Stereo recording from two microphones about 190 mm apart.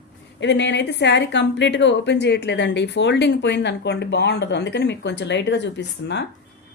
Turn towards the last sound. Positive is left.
turn(degrees=65)  # may be behind; listen again after turning